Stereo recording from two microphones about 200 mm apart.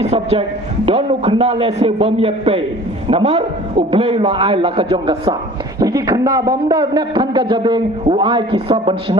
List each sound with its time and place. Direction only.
0.0 s a man's voice: 30° right (ahead or behind)